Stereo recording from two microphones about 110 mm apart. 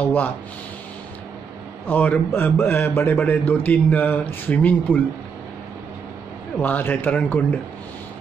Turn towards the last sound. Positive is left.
turn(degrees=15)  # may be behind; listen again after turning